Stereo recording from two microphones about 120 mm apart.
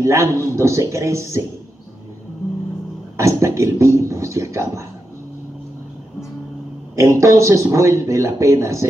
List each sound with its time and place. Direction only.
0.0 s speech: 25° right (ahead or behind)
3.2 s speech: 25° right (ahead or behind)
7.0 s speech: 25° right (ahead or behind)